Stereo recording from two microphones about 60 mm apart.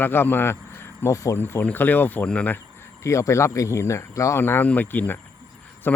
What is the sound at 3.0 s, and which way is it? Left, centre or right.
Speech, left.